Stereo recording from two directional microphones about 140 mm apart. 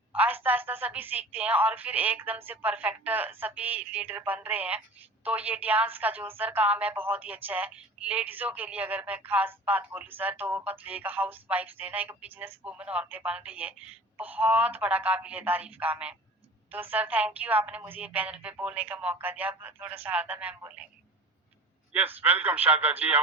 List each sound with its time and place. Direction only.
0.2 s a woman's voice: 10° right (ahead or behind)
21.9 s a woman's voice: 10° right (ahead or behind)